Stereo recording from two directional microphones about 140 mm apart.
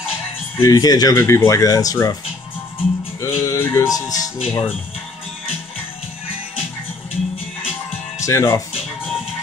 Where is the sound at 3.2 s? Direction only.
20° left (ahead or behind).